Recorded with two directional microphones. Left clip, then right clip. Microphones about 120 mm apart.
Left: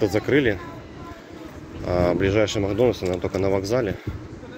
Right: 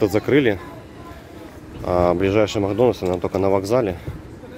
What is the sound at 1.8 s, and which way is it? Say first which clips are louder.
Speech: right 3 dB; 50° right (ahead or behind).